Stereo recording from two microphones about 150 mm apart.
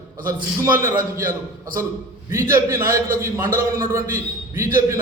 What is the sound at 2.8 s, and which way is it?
Speech, 70° right (ahead or behind).